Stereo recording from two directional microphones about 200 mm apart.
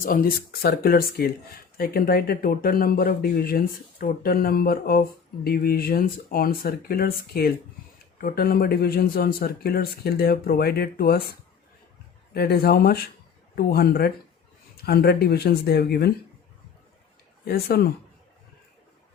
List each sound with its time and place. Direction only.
0.0 s speech: 45° left (ahead or behind)
17.4 s speech: 50° left (ahead or behind)